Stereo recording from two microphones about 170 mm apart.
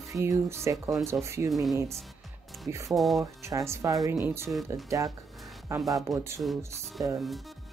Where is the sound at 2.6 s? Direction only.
20° right (ahead or behind).